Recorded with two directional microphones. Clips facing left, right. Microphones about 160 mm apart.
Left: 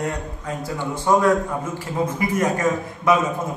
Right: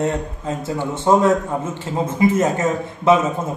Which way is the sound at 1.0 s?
25° right (ahead or behind).